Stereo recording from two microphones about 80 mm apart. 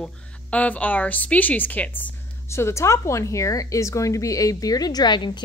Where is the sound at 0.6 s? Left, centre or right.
Centre.